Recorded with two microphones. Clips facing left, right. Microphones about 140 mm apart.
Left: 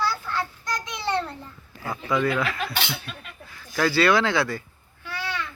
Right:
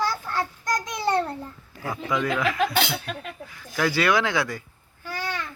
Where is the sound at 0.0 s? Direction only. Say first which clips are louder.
Right 1 dB; 45° right (ahead or behind).